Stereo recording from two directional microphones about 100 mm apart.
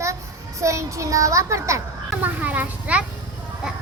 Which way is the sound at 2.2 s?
15° right (ahead or behind).